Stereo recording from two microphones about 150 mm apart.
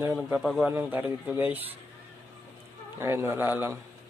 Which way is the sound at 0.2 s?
Centre (ahead or behind).